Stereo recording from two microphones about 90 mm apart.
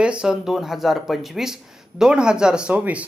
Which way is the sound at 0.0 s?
10° right (ahead or behind).